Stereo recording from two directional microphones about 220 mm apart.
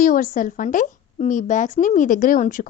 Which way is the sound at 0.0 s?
35° left (ahead or behind).